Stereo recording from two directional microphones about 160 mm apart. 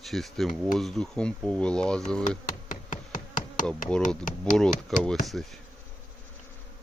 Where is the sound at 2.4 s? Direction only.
55° left (ahead or behind).